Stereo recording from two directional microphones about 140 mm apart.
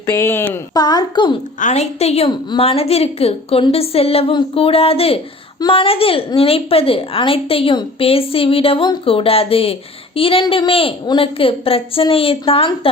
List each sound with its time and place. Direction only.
0.0 s speech: 20° left (ahead or behind)
0.8 s a woman's voice: 30° left (ahead or behind)
1.5 s a woman's voice: 55° left (ahead or behind); by 12.9 s 40° left (ahead or behind)